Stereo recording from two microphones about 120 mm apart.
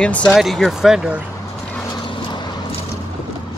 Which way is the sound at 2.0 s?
40° left (ahead or behind).